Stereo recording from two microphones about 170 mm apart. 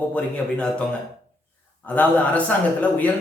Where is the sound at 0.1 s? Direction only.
5° left (ahead or behind).